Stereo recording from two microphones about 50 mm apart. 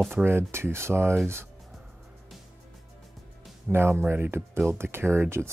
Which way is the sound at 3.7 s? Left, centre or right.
Right.